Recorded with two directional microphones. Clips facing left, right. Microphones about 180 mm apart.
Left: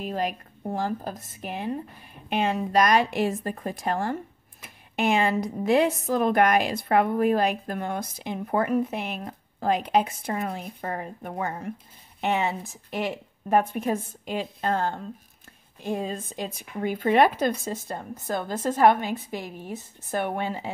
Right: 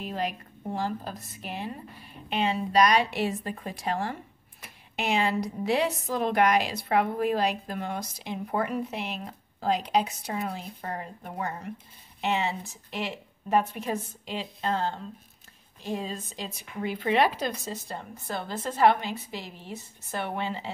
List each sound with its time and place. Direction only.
0.0 s a woman's voice: 45° left (ahead or behind)